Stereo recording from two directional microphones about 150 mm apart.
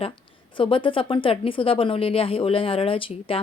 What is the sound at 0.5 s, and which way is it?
A woman's voice, 35° left (ahead or behind).